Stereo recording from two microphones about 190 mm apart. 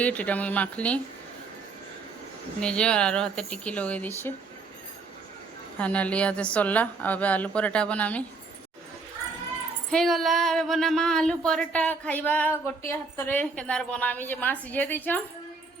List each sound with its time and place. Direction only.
0.0 s speech: 5° left (ahead or behind)
2.6 s speech: 5° left (ahead or behind)
5.8 s speech: 5° left (ahead or behind)
9.9 s speech: centre (ahead or behind)